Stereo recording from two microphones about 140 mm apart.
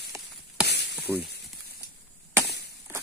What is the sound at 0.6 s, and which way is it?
Sizzle, 10° right (ahead or behind).